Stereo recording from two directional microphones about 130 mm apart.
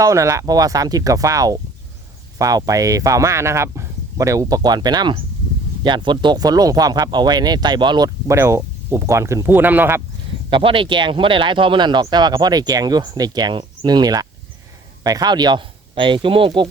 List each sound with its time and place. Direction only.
0.0 s speech: 25° right (ahead or behind)
10.5 s speech: 45° right (ahead or behind)